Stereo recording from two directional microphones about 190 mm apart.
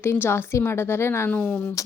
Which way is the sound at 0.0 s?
15° left (ahead or behind).